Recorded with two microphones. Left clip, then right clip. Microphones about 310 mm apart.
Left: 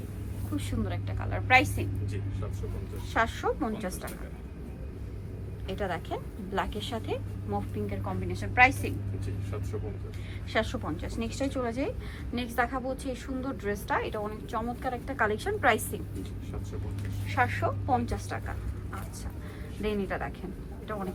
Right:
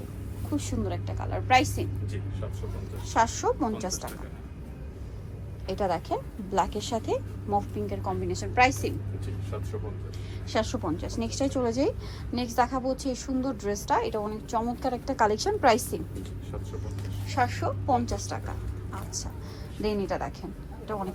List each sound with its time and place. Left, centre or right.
0.5 s a woman's voice: centre
3.1 s a woman's voice: centre
5.7 s a woman's voice: centre
10.5 s a woman's voice: centre
17.2 s a woman's voice: centre
19.8 s a woman's voice: centre